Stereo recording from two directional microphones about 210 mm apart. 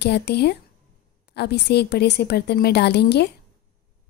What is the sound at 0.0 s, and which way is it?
A woman's voice, 50° left (ahead or behind).